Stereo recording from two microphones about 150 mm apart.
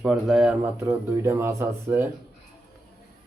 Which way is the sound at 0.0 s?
5° right (ahead or behind).